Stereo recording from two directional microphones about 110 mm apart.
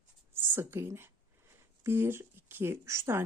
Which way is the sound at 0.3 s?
20° right (ahead or behind).